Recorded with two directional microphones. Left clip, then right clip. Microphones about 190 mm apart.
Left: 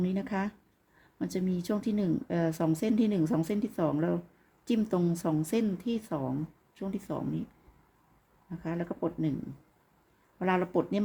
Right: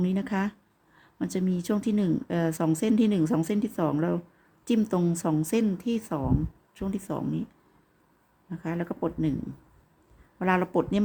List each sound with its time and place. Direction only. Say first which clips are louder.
0.0 s speech: right 3 dB; 15° right (ahead or behind)
8.4 s speech: right 3 dB; 15° right (ahead or behind)
10.3 s speech: right 3 dB; 15° right (ahead or behind)